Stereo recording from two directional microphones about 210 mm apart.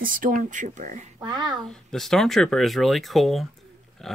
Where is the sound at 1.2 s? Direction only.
20° right (ahead or behind).